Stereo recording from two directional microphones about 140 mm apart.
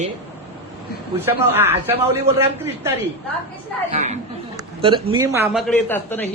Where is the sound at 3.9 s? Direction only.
50° right (ahead or behind).